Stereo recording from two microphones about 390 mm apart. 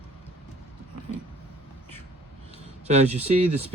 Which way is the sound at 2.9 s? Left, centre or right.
Centre.